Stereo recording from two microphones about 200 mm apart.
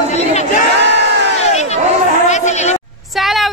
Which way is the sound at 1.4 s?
35° left (ahead or behind).